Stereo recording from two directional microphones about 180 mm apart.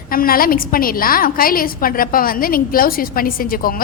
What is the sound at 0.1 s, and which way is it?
A woman's voice, 55° left (ahead or behind).